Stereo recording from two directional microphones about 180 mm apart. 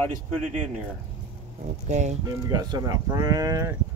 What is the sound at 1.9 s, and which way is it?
Speech, 40° right (ahead or behind).